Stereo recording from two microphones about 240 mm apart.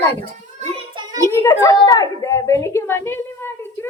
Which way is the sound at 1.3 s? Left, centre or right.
Centre.